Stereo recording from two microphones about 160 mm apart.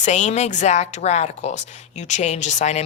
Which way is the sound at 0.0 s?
50° left (ahead or behind).